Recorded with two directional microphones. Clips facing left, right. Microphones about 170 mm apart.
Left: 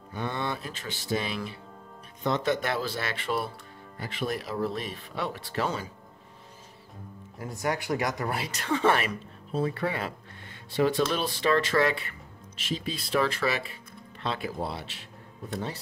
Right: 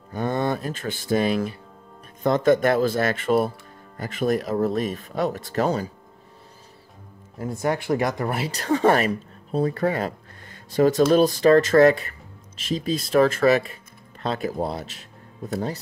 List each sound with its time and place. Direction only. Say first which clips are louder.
0.1 s speech: right 8 dB; 45° right (ahead or behind)
8.2 s speech: right 5 dB; 25° right (ahead or behind); by 15.8 s 40° right (ahead or behind)